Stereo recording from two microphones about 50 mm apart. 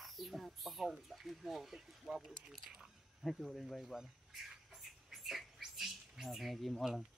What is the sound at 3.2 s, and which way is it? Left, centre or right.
Speech, centre.